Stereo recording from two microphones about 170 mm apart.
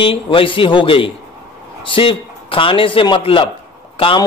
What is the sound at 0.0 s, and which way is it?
A man's voice, 30° left (ahead or behind).